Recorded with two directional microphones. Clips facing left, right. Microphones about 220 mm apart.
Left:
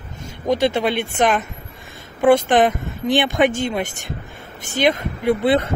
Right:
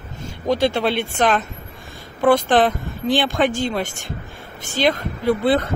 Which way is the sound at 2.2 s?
20° left (ahead or behind).